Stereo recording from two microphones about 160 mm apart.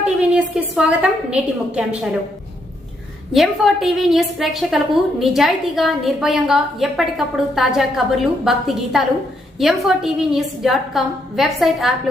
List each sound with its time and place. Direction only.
0.0 s a woman's voice: 5° right (ahead or behind)
3.3 s a woman's voice: centre (ahead or behind)